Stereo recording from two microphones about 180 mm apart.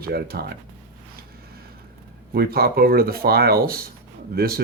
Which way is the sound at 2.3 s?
60° right (ahead or behind).